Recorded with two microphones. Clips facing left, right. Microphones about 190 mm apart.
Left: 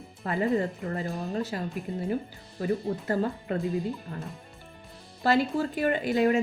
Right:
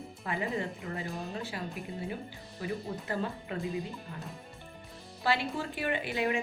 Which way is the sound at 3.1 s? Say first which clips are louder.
Left 7 dB; 40° left (ahead or behind).